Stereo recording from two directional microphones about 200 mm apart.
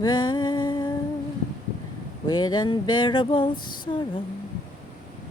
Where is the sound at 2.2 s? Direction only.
20° left (ahead or behind).